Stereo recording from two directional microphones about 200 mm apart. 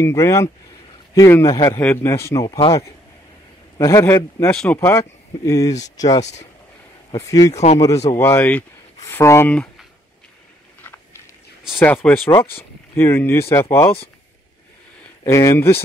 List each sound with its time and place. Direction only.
0.0 s speech: 15° left (ahead or behind)
3.7 s speech: 15° left (ahead or behind)
7.2 s speech: 15° left (ahead or behind)
7.5 s speech: 35° left (ahead or behind)
8.1 s speech: 10° left (ahead or behind)
11.8 s speech: 5° left (ahead or behind)
15.2 s speech: 15° left (ahead or behind)